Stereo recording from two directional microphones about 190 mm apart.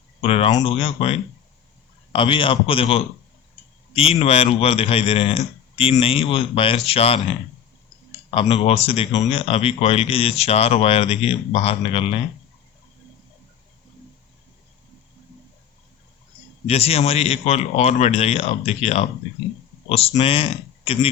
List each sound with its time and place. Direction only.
0.2 s a man's voice: 30° left (ahead or behind)
8.4 s speech: 30° left (ahead or behind)
16.6 s speech: 30° left (ahead or behind)